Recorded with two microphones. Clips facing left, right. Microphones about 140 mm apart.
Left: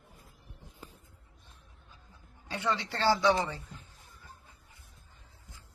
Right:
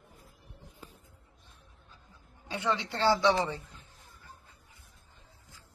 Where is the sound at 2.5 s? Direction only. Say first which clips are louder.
Right 1 dB; 15° right (ahead or behind).